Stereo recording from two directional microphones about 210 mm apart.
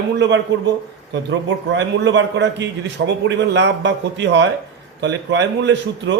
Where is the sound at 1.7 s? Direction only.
60° right (ahead or behind).